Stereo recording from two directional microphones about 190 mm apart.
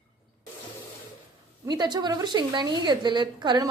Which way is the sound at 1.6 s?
20° right (ahead or behind).